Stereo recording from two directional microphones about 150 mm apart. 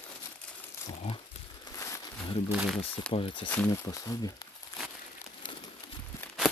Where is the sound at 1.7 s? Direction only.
20° left (ahead or behind).